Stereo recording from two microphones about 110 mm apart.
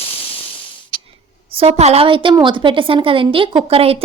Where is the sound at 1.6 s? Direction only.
75° right (ahead or behind).